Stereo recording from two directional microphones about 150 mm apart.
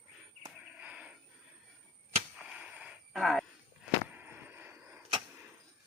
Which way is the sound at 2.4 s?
5° right (ahead or behind).